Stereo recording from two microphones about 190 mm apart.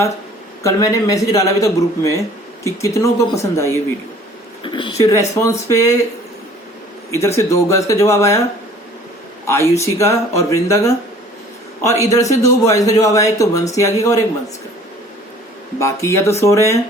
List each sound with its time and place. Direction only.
0.6 s speech: 20° left (ahead or behind)
4.6 s speech: 25° left (ahead or behind)
7.1 s speech: 15° left (ahead or behind)
9.5 s speech: 15° left (ahead or behind)
15.8 s speech: 15° left (ahead or behind)